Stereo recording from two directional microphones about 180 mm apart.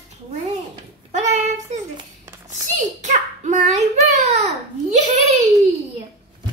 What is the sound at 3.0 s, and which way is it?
Child singing, 40° right (ahead or behind).